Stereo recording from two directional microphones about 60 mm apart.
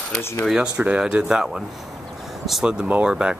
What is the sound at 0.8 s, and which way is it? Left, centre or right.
Speech, centre.